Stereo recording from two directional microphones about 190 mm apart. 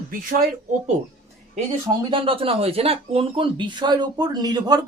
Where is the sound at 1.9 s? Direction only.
30° right (ahead or behind).